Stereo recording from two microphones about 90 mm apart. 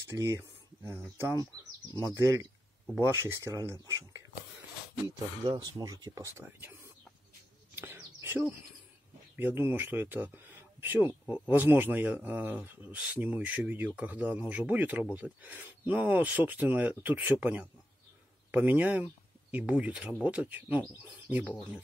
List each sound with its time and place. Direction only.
0.1 s speech: 30° right (ahead or behind)
5.5 s speech: 50° right (ahead or behind)
6.4 s speech: 25° right (ahead or behind)
7.7 s a sound: 25° right (ahead or behind)
9.4 s speech: 25° right (ahead or behind)